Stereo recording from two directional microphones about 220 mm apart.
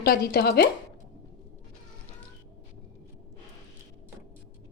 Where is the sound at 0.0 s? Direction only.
45° left (ahead or behind).